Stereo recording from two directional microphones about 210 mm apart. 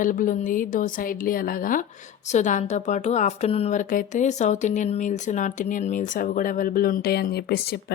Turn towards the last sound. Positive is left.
turn(degrees=50)  # may be behind; listen again after turning